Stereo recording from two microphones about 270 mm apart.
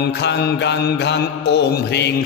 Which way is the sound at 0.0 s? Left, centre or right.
Left.